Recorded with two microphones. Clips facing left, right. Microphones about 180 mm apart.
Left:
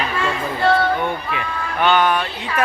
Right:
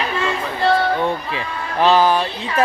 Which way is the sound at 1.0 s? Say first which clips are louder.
Right 2 dB; 30° right (ahead or behind).